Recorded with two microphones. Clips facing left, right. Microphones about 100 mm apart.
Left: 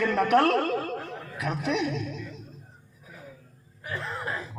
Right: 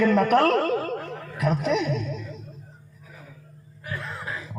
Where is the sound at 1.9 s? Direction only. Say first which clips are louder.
Right 4 dB; 55° right (ahead or behind).